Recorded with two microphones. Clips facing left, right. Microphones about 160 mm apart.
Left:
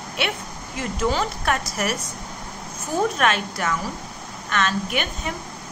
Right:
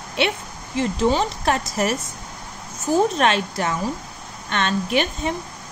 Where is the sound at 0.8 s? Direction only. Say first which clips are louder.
Right 4 dB; 20° right (ahead or behind).